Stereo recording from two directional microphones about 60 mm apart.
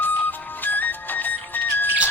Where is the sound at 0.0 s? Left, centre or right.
Left.